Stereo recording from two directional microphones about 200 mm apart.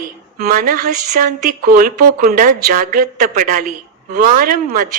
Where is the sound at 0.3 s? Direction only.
45° right (ahead or behind).